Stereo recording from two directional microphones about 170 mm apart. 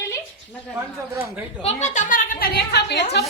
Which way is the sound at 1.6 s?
40° left (ahead or behind).